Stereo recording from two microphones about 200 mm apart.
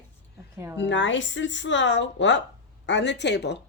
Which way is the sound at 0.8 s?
65° left (ahead or behind).